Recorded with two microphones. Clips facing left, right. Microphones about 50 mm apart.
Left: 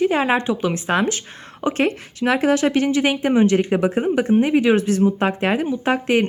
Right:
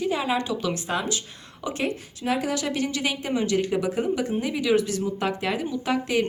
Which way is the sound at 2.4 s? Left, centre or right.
Left.